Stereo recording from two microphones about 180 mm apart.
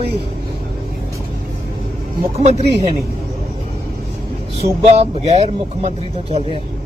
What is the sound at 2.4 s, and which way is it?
Speech, 35° right (ahead or behind).